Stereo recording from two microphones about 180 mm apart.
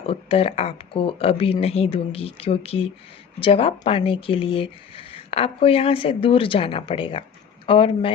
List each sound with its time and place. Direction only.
0.0 s speech: 30° left (ahead or behind)